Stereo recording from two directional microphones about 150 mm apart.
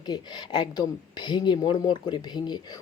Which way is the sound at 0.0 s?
30° left (ahead or behind).